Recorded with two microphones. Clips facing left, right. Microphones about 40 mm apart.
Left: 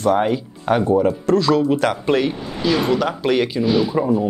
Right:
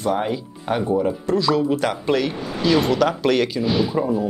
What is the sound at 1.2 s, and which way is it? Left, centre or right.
Speech, left.